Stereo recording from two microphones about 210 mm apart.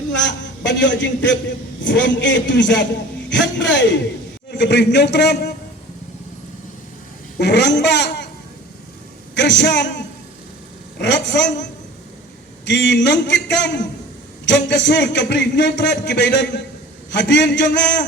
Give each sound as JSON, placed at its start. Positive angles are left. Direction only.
{"t": 0.2, "sound": "a man's voice", "side_deg": 60}
{"t": 7.3, "sound": "a woman's voice", "side_deg": 55}
{"t": 9.3, "sound": "a man's voice", "side_deg": 55}
{"t": 11.0, "sound": "a man's voice", "side_deg": 55}